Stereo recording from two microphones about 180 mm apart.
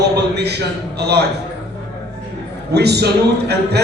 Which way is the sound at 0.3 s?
65° right (ahead or behind).